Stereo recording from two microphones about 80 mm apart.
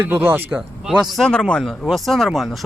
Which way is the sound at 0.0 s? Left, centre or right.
Right.